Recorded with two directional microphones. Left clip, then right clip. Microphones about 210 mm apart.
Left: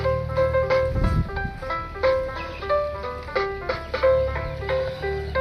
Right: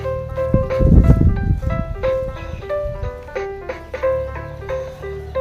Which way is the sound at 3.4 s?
30° right (ahead or behind).